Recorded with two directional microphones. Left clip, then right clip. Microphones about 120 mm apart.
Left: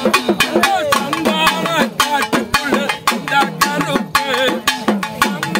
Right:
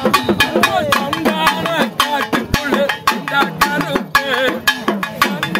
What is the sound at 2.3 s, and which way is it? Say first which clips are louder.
Music: even; 30° right (ahead or behind).